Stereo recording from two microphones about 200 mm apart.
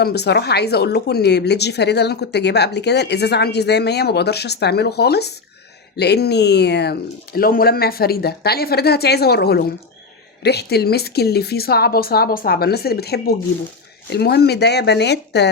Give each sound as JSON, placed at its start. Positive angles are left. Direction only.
{"t": 0.0, "sound": "speech", "side_deg": 55}